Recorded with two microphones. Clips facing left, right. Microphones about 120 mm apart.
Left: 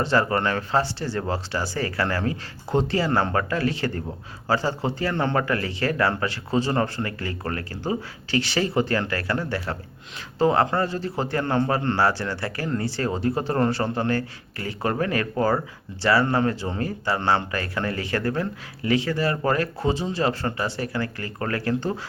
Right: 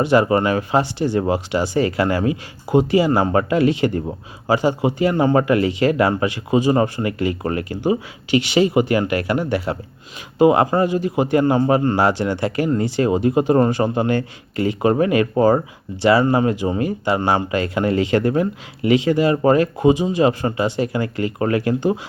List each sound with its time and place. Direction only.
0.0 s a man's voice: 15° right (ahead or behind)